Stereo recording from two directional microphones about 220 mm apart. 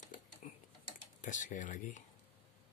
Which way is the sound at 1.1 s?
35° left (ahead or behind).